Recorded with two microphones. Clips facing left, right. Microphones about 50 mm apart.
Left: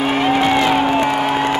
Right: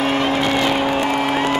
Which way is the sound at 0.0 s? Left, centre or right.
Centre.